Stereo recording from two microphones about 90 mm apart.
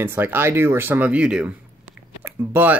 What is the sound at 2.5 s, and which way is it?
Speech, 20° right (ahead or behind).